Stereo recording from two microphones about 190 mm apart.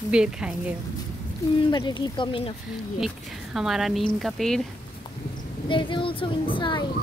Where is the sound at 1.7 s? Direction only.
25° left (ahead or behind).